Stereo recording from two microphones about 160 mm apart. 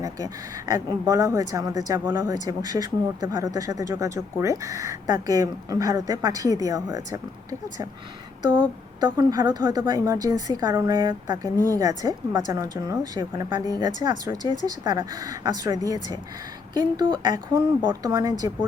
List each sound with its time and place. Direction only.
0.0 s a woman's voice: 20° right (ahead or behind)
8.4 s a woman's voice: 30° right (ahead or behind)